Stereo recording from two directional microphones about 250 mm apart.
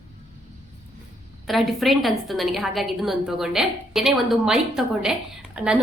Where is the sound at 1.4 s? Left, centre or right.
Centre.